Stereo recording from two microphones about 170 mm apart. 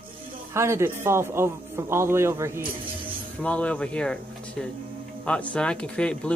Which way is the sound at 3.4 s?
5° left (ahead or behind).